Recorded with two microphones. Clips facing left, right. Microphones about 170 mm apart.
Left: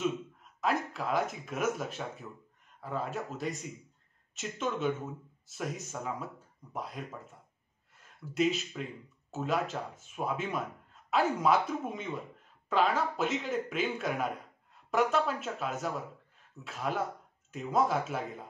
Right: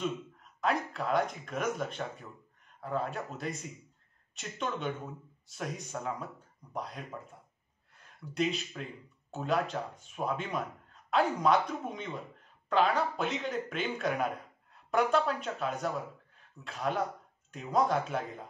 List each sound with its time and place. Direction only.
0.0 s speech: centre (ahead or behind)